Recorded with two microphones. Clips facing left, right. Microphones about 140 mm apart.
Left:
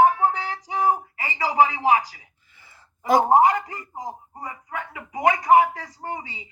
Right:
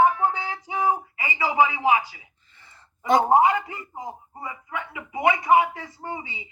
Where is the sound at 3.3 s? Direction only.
40° left (ahead or behind).